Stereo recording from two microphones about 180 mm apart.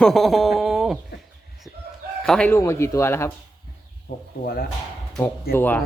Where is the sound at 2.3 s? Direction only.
5° left (ahead or behind).